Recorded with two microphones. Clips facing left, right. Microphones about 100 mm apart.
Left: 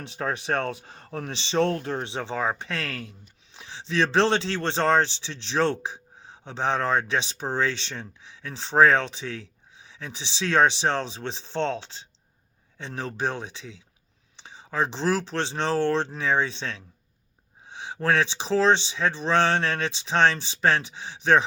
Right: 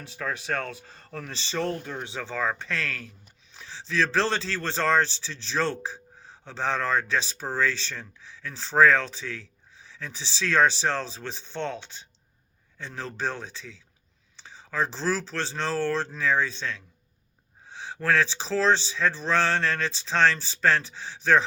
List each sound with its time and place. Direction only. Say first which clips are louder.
0.2 s speech: left 4 dB; 25° left (ahead or behind)
1.5 s speech: left 6 dB; 75° left (ahead or behind)
2.1 s speech: right 1 dB; 20° left (ahead or behind)